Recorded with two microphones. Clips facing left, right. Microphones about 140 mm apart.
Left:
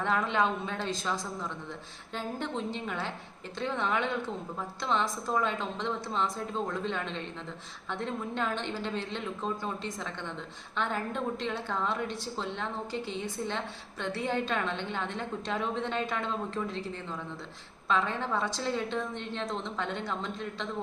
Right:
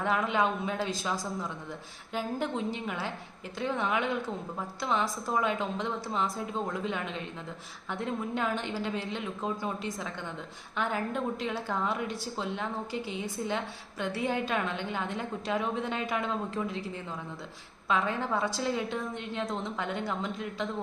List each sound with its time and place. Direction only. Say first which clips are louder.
0.0 s a woman's voice: even; 5° right (ahead or behind)